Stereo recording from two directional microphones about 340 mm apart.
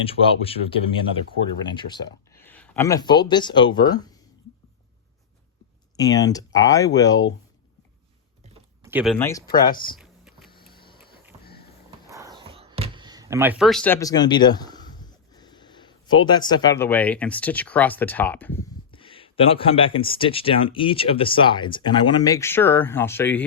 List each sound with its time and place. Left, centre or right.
0.0 s speech: centre
1.6 s speech: centre
6.0 s speech: centre
8.8 s speech: centre
10.0 s a sound: centre
11.3 s sniff: centre
11.9 s a sound: centre
16.1 s speech: centre